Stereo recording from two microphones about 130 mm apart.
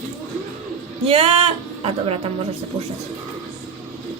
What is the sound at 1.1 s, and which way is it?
Speech, 50° right (ahead or behind).